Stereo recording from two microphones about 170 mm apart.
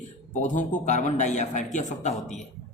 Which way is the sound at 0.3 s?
50° left (ahead or behind).